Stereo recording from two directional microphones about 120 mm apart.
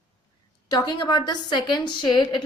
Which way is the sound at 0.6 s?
35° left (ahead or behind).